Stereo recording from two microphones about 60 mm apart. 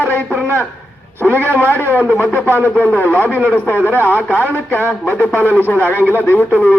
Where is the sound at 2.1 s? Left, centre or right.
Left.